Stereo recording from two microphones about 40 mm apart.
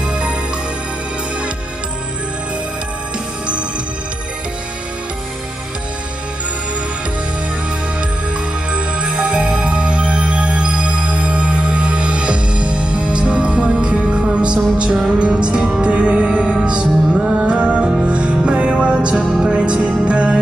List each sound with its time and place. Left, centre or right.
0.0 s music: right
8.7 s music: right